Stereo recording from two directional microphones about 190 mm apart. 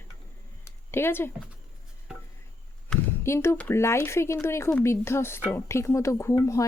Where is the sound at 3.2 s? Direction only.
15° left (ahead or behind).